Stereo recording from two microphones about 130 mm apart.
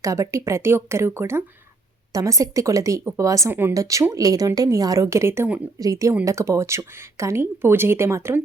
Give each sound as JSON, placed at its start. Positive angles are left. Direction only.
{"t": 0.0, "sound": "a woman's voice", "side_deg": -25}